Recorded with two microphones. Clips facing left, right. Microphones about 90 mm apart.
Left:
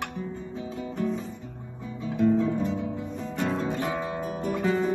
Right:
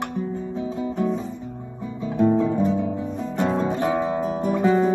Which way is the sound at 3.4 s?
30° right (ahead or behind).